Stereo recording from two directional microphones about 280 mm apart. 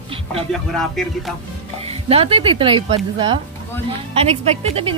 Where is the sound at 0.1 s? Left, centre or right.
Centre.